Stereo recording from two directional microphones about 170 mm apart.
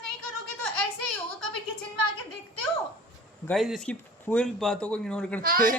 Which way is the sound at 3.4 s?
Centre (ahead or behind).